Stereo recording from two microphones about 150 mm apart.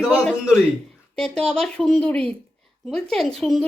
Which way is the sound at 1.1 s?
5° left (ahead or behind).